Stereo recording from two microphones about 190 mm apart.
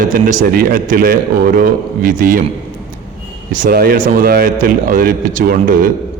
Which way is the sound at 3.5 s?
50° right (ahead or behind).